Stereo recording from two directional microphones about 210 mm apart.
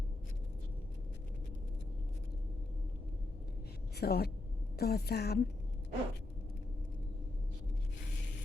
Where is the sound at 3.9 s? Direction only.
50° left (ahead or behind).